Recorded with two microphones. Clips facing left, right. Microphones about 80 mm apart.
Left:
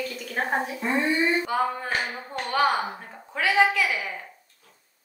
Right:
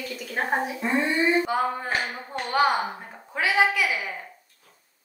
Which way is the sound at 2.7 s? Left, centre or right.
Centre.